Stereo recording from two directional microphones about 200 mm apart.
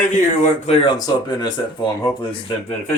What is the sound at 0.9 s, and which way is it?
Speech, 20° left (ahead or behind).